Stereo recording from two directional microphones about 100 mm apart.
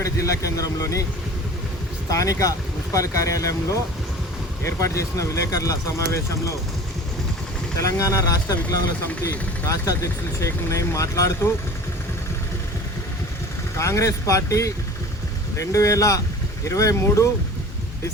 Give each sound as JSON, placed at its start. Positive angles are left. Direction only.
{"t": 0.0, "sound": "speech", "side_deg": 30}
{"t": 2.0, "sound": "speech", "side_deg": 35}
{"t": 7.8, "sound": "speech", "side_deg": 35}
{"t": 13.7, "sound": "speech", "side_deg": 30}